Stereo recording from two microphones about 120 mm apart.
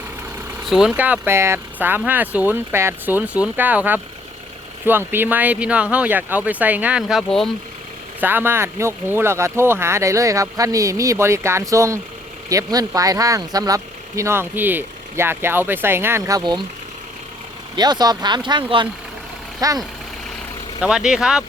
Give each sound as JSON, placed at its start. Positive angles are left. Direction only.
{"t": 0.7, "sound": "speech", "side_deg": 0}
{"t": 0.9, "sound": "speech", "side_deg": -15}
{"t": 8.2, "sound": "speech", "side_deg": -15}
{"t": 17.7, "sound": "speech", "side_deg": -35}
{"t": 20.8, "sound": "speech", "side_deg": -5}